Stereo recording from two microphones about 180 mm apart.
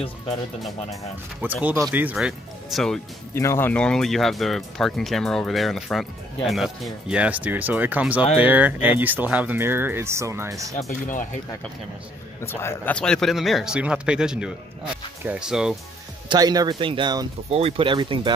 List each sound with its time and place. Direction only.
1.4 s speech: 10° right (ahead or behind)
3.3 s speech: 15° left (ahead or behind); by 10.7 s 15° right (ahead or behind)
12.4 s speech: 15° left (ahead or behind); by 15.7 s 5° right (ahead or behind)
16.3 s speech: 20° right (ahead or behind)
17.5 s speech: 35° right (ahead or behind)